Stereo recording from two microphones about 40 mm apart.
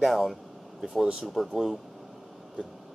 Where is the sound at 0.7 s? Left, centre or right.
Centre.